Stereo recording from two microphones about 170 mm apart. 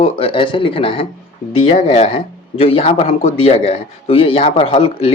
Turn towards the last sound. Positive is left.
turn(degrees=35)  # may be behind; listen again after turning